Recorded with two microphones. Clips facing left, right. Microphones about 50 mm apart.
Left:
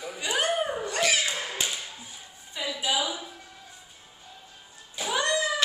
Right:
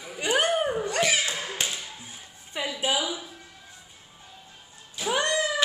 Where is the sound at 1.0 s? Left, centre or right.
Centre.